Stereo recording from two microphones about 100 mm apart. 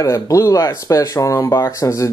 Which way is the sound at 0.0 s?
35° left (ahead or behind).